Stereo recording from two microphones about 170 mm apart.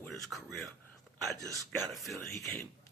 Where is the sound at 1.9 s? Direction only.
Centre (ahead or behind).